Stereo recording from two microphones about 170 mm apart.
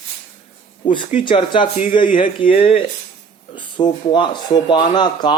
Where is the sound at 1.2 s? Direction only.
30° left (ahead or behind).